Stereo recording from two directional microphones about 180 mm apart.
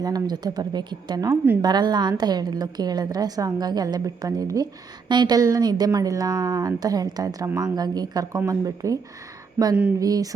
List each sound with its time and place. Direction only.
0.0 s a woman's voice: 20° right (ahead or behind)
10.0 s a woman's voice: 20° right (ahead or behind)